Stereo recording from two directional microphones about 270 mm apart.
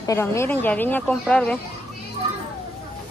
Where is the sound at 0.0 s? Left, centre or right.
Centre.